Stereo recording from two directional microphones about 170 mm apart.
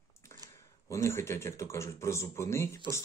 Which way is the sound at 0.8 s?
20° left (ahead or behind).